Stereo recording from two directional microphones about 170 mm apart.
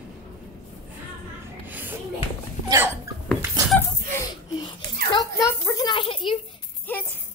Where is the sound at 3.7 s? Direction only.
15° left (ahead or behind).